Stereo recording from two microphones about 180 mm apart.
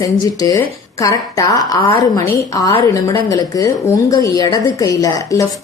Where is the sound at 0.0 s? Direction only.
20° left (ahead or behind).